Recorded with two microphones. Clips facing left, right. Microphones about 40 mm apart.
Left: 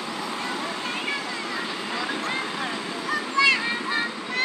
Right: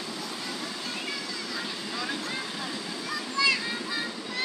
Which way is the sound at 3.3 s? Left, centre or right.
Left.